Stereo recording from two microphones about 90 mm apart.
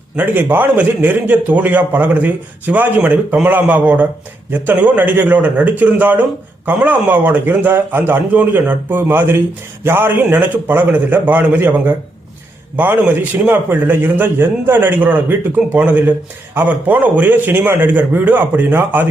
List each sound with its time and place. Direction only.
0.2 s a man's voice: 20° right (ahead or behind)